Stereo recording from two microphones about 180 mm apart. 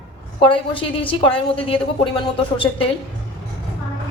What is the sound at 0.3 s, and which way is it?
A woman's voice, 30° left (ahead or behind).